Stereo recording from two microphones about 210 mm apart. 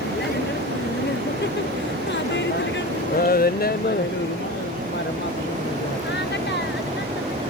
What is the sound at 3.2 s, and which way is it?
Speech, 45° left (ahead or behind).